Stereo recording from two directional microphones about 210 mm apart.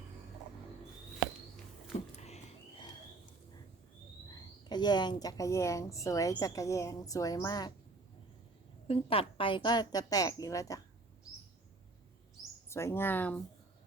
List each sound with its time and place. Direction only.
2.1 s a sound: 30° left (ahead or behind)
4.3 s speech: 20° left (ahead or behind)
8.9 s a woman's voice: 25° left (ahead or behind)
12.6 s speech: 10° left (ahead or behind)